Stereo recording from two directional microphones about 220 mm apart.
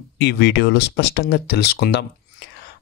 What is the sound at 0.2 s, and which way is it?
Speech, 50° left (ahead or behind).